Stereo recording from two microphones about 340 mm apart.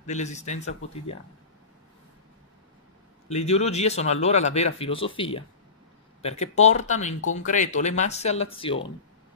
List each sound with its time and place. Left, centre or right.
0.0 s speech: left
3.3 s speech: centre